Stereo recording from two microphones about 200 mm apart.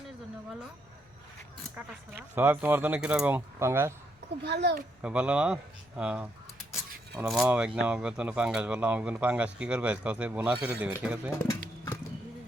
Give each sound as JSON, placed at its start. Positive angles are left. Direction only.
{"t": 1.7, "sound": "speech", "side_deg": -10}
{"t": 4.4, "sound": "speech", "side_deg": -55}
{"t": 5.0, "sound": "speech", "side_deg": -5}
{"t": 7.3, "sound": "speech", "side_deg": -5}